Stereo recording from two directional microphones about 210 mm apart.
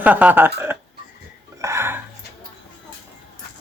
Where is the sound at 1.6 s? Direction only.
15° right (ahead or behind).